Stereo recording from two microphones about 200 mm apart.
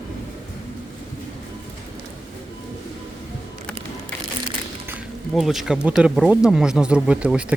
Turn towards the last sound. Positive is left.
turn(degrees=-5)  # may be behind; listen again after turning